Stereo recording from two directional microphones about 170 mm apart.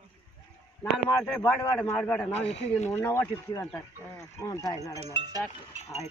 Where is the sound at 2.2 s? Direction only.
40° left (ahead or behind).